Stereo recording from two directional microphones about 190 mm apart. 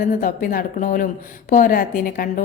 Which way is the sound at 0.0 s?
45° left (ahead or behind).